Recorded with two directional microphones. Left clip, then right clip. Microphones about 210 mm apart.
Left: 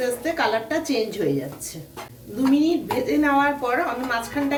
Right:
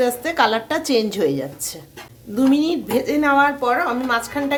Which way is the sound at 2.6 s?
55° right (ahead or behind).